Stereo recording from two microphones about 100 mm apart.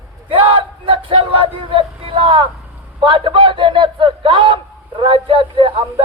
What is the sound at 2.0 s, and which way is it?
Vehicle, 60° right (ahead or behind).